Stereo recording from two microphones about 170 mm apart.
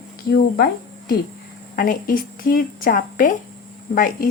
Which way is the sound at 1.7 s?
55° left (ahead or behind).